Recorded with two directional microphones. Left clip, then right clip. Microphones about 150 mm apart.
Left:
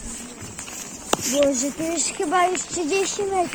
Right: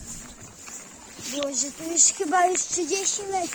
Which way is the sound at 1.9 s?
15° left (ahead or behind).